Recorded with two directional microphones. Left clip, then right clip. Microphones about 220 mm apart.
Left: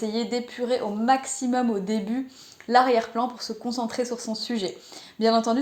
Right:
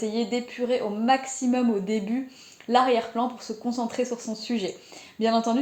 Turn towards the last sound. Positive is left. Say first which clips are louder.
# left 2 dB
turn(degrees=30)  # may be behind; listen again after turning